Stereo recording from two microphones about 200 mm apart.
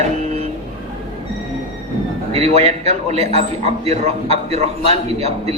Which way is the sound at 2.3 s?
30° right (ahead or behind).